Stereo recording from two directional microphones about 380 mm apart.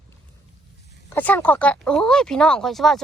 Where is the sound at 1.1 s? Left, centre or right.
Centre.